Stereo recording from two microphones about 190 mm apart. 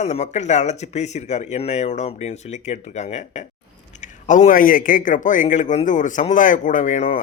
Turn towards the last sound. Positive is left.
turn(degrees=40)  # may be behind; listen again after turning